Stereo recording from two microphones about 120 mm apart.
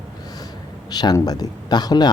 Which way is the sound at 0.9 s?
35° left (ahead or behind).